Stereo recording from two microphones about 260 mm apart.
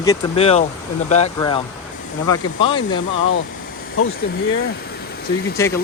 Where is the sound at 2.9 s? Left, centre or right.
Left.